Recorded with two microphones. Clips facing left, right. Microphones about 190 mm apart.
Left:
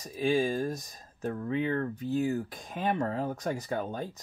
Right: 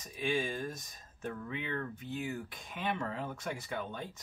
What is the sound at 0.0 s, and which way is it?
Speech, 35° left (ahead or behind).